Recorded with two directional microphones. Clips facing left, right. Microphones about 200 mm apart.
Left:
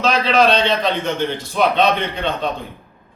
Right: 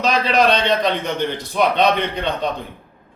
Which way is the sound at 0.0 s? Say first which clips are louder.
Left 1 dB; 15° right (ahead or behind).